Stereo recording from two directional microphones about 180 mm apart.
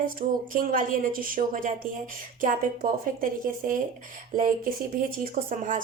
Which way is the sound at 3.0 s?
50° right (ahead or behind).